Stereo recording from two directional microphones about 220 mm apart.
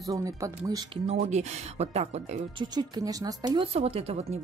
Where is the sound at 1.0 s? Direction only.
30° right (ahead or behind).